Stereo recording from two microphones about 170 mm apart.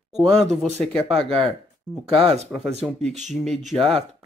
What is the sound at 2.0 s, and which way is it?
Speech, 30° right (ahead or behind).